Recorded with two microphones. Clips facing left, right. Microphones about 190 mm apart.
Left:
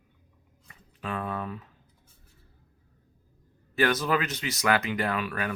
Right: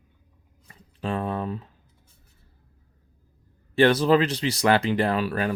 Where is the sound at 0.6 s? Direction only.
30° right (ahead or behind).